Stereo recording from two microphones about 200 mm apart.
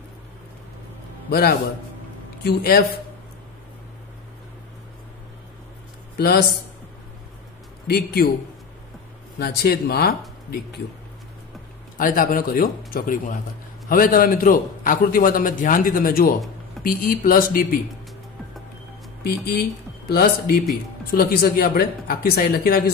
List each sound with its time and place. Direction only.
2.4 s a man's voice: 50° left (ahead or behind)
6.1 s speech: 50° left (ahead or behind)
7.8 s a man's voice: 50° left (ahead or behind)
9.4 s a man's voice: 50° left (ahead or behind)
12.0 s a man's voice: 45° left (ahead or behind)
19.2 s a man's voice: 50° left (ahead or behind)